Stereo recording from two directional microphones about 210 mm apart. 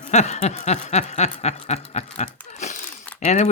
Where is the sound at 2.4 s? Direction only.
35° left (ahead or behind).